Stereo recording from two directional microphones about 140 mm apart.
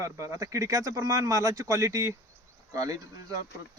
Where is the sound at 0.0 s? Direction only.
25° right (ahead or behind).